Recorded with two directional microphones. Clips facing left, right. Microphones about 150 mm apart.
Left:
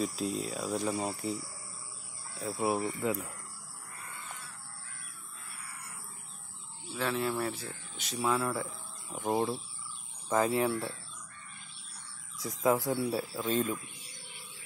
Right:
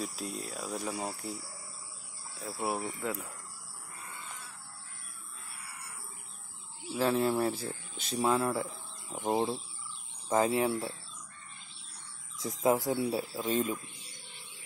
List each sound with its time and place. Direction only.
0.0 s speech: 5° right (ahead or behind)
7.0 s speech: 35° right (ahead or behind)
12.4 s speech: 20° right (ahead or behind)